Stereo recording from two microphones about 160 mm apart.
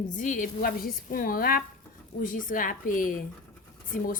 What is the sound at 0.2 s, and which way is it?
A woman's voice, 55° left (ahead or behind).